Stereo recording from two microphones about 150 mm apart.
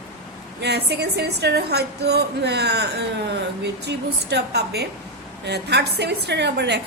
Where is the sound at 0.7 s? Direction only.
90° right.